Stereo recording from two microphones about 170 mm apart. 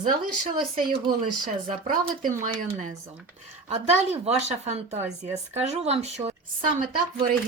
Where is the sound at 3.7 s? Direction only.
40° right (ahead or behind).